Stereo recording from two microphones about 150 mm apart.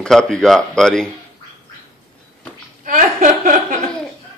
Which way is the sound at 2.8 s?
60° right (ahead or behind).